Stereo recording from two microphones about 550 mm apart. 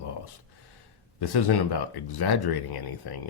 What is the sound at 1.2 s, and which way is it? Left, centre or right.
Speech, left.